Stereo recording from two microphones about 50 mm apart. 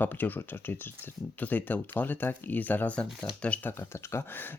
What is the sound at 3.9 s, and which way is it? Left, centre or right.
Speech, left.